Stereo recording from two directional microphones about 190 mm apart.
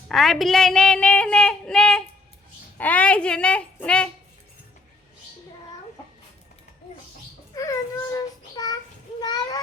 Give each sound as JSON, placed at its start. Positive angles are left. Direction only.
{"t": 0.1, "sound": "a woman's voice", "side_deg": 0}
{"t": 7.5, "sound": "a child's voice", "side_deg": 15}
{"t": 9.2, "sound": "a sound", "side_deg": 20}